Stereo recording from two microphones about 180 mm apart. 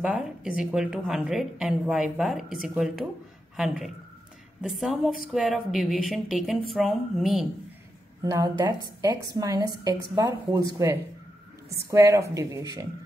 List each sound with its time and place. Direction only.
0.0 s a woman's voice: 5° right (ahead or behind)
8.2 s a woman's voice: 20° right (ahead or behind)
11.7 s speech: 15° right (ahead or behind)